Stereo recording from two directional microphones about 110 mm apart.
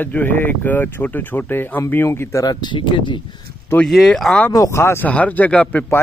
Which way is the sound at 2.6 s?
45° left (ahead or behind).